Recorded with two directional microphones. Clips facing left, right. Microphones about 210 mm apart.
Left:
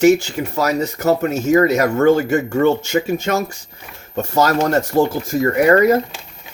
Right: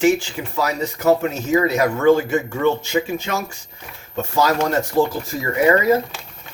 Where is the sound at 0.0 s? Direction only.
45° left (ahead or behind).